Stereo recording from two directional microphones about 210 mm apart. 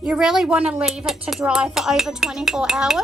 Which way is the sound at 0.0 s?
5° right (ahead or behind).